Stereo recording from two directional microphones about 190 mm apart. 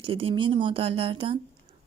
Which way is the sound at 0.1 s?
30° right (ahead or behind).